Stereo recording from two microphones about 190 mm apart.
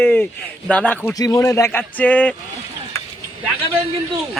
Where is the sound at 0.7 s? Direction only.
10° left (ahead or behind).